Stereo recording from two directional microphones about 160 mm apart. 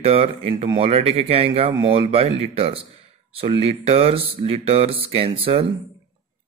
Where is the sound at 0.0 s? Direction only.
35° right (ahead or behind).